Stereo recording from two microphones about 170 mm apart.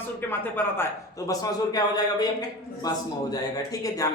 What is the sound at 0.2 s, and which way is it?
Speech, 10° left (ahead or behind).